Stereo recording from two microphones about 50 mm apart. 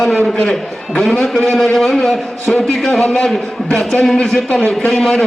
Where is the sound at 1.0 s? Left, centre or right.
Centre; by 4.9 s left.